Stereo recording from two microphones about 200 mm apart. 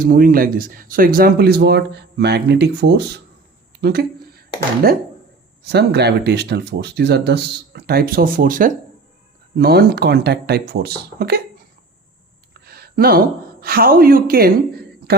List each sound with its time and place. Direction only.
0.0 s speech: 45° right (ahead or behind)
12.5 s speech: 50° right (ahead or behind)